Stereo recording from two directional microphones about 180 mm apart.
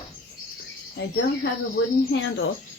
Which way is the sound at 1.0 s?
70° left (ahead or behind).